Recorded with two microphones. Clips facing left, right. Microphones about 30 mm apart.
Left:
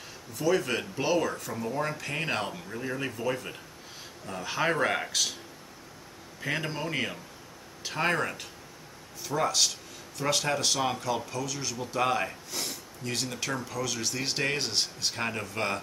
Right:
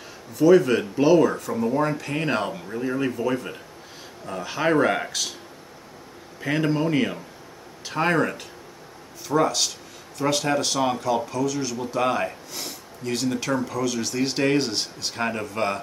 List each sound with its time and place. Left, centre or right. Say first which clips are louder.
0.4 s speech: right 10 dB; centre
6.4 s speech: right 9 dB; centre
9.3 s speech: right 8 dB; centre
10.1 s speech: right 5 dB; centre